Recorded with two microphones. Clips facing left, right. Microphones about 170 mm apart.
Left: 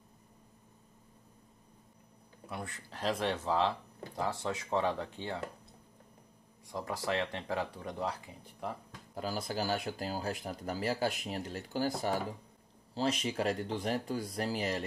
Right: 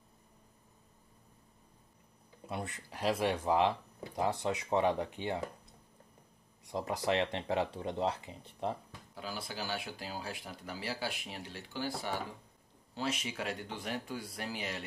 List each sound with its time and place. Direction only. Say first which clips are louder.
2.4 s speech: right 2 dB; 20° right (ahead or behind)
6.7 s speech: right 2 dB; 20° right (ahead or behind)
9.1 s speech: left 6 dB; 40° left (ahead or behind)
12.9 s speech: left 5 dB; 35° left (ahead or behind)